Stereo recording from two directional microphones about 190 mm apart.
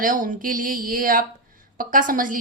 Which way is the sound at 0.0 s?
45° right (ahead or behind).